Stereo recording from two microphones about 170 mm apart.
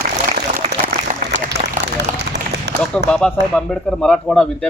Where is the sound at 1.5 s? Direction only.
80° right.